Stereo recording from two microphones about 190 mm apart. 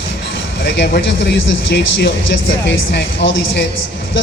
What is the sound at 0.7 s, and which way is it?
Speech, 65° left (ahead or behind).